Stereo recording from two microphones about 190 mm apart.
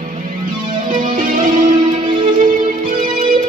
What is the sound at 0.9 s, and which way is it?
Music, 45° right (ahead or behind).